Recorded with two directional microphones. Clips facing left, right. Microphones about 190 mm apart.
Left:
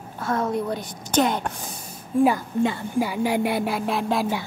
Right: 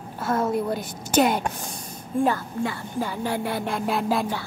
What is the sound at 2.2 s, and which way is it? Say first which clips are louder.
Speech: left 5 dB; 20° left (ahead or behind).